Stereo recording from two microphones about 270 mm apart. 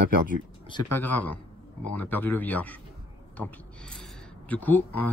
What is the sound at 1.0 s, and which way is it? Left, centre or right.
Speech, centre.